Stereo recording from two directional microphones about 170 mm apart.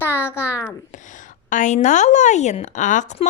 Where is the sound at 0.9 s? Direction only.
50° left (ahead or behind).